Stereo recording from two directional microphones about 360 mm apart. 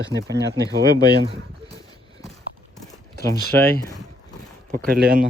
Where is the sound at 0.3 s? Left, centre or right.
Right.